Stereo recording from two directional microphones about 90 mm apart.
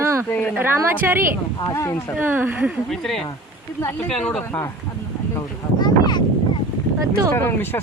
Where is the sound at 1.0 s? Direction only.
25° right (ahead or behind).